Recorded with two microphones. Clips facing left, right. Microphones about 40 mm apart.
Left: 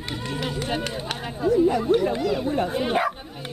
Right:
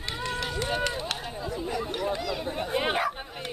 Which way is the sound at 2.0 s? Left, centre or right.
Centre.